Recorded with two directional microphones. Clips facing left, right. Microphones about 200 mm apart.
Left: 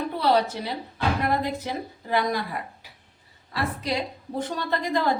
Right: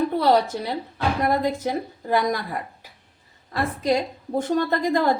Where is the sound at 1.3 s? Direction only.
45° right (ahead or behind).